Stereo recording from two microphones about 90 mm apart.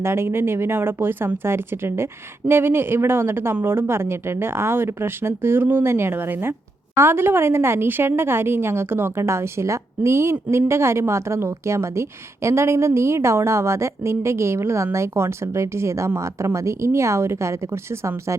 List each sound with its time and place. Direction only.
0.0 s a woman's voice: 30° right (ahead or behind)